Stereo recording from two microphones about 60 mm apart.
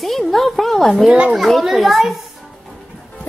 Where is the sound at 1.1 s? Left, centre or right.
Centre.